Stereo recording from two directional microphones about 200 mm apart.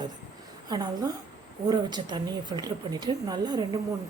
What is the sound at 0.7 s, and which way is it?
A woman's voice, 20° right (ahead or behind).